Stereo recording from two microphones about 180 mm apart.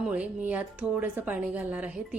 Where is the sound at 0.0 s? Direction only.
10° right (ahead or behind).